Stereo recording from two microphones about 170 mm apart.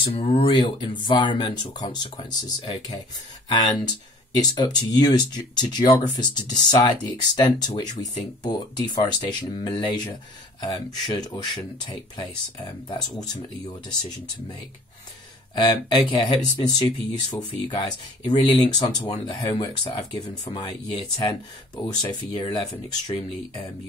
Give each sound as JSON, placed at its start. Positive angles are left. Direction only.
{"t": 0.0, "sound": "speech", "side_deg": 35}
{"t": 15.5, "sound": "speech", "side_deg": 25}